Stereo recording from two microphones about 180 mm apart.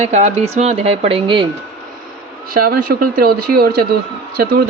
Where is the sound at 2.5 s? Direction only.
55° right (ahead or behind).